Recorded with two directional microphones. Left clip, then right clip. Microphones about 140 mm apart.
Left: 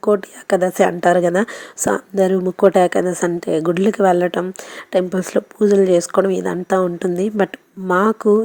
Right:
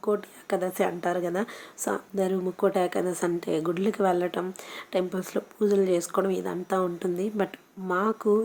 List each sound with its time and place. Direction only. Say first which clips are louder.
0.0 s a woman's voice: left 11 dB; 60° left (ahead or behind)